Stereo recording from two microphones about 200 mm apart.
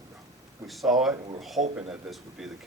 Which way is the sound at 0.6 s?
Centre (ahead or behind).